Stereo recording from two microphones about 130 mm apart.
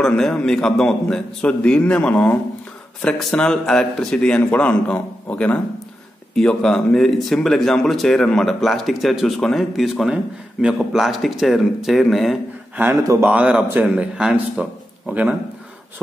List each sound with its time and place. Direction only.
0.0 s a man's voice: 5° left (ahead or behind)
13.0 s a man's voice: 25° right (ahead or behind)
13.3 s a man's voice: 10° right (ahead or behind)